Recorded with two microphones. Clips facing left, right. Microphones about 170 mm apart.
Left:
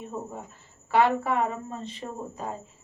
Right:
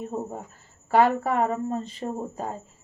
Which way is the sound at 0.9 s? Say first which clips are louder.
Right 2 dB; 40° right (ahead or behind).